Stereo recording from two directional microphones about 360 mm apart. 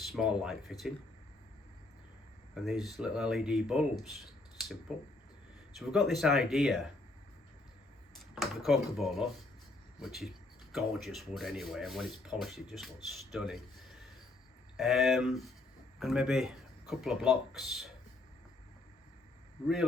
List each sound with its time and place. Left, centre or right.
0.1 s speech: centre
2.6 s speech: centre
8.4 s speech: centre
14.8 s speech: centre